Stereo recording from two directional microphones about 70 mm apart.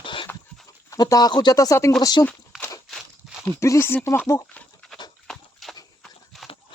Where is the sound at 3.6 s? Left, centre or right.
Left.